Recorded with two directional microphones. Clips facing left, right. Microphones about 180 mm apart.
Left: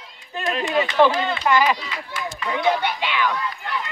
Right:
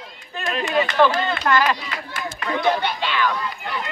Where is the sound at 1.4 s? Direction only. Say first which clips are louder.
Left 2 dB; 10° left (ahead or behind).